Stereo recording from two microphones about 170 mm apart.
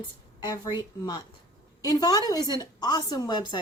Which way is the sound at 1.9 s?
20° left (ahead or behind).